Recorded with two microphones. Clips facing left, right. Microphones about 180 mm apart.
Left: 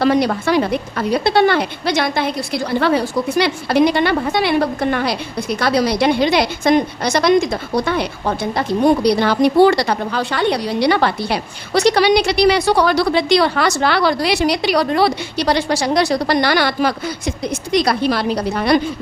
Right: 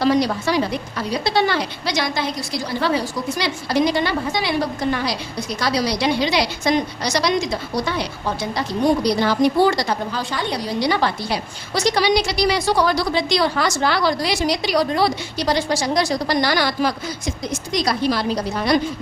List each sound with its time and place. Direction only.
0.0 s a woman's voice: 55° left (ahead or behind)